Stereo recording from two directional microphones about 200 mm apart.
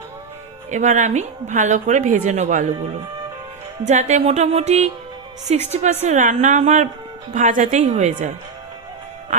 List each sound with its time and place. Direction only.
0.7 s a woman's voice: 35° right (ahead or behind)
3.8 s a woman's voice: 35° right (ahead or behind)